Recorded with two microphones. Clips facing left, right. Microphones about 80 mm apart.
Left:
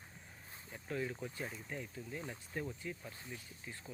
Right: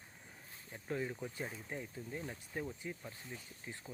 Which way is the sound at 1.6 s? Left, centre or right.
Centre.